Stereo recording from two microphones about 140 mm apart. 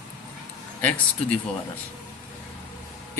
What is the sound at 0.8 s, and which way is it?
Speech, 10° left (ahead or behind).